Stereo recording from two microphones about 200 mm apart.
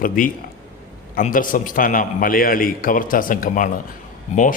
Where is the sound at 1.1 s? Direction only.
45° left (ahead or behind).